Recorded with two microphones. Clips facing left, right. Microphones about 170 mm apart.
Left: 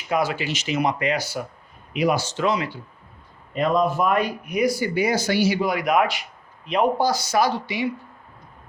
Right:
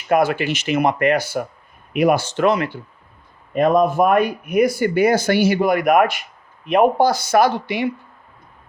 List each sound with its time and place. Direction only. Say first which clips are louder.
0.1 s a man's voice: right 6 dB; 55° right (ahead or behind)